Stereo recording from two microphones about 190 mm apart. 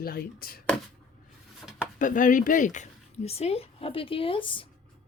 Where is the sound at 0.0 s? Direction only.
50° left (ahead or behind).